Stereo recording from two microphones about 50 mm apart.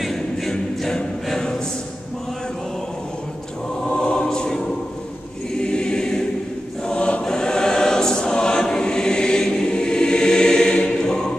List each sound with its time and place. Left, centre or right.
0.0 s a capella: centre
3.8 s choir: left